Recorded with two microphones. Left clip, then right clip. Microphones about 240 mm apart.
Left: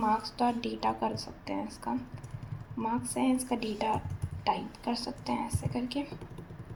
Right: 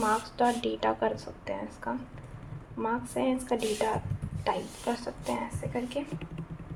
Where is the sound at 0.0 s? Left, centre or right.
Right.